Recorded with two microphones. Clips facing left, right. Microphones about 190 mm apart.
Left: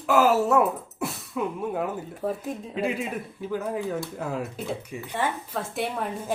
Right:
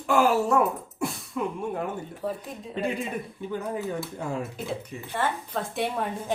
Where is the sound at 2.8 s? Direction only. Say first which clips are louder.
Even; 5° left (ahead or behind).